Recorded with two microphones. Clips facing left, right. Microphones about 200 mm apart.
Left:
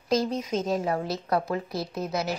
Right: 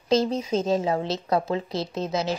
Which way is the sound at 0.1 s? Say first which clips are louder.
Right 3 dB; 25° right (ahead or behind).